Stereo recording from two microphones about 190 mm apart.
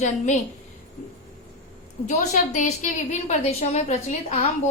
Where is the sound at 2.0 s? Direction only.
40° left (ahead or behind).